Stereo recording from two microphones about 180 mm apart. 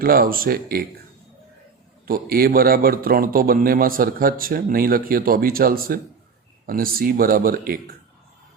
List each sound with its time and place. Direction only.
0.0 s a man's voice: 55° right (ahead or behind)
2.0 s a man's voice: 55° right (ahead or behind)